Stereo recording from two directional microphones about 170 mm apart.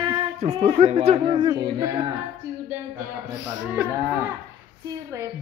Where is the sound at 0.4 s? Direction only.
40° right (ahead or behind); by 1.9 s 25° right (ahead or behind).